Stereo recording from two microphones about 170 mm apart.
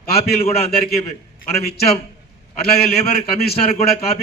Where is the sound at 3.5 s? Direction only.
35° left (ahead or behind).